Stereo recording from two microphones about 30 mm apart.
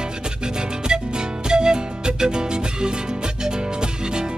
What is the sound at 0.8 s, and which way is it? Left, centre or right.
Music, right.